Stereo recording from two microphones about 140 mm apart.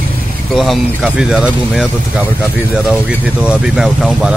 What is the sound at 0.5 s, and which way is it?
A man's voice, centre (ahead or behind).